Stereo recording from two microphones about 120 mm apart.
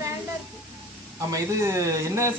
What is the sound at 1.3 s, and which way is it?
A man's voice, 25° right (ahead or behind).